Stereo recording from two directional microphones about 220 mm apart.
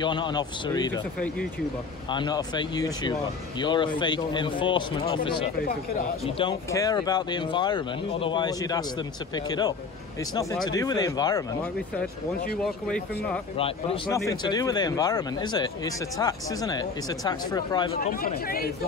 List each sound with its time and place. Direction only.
0.0 s speech: 20° left (ahead or behind)
2.0 s speech: 20° left (ahead or behind)
12.8 s speech: 5° left (ahead or behind)
13.6 s speech: 25° left (ahead or behind)
17.9 s speech: 40° left (ahead or behind)